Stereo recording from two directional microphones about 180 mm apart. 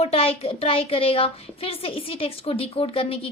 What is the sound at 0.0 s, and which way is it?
A woman's voice, 35° left (ahead or behind).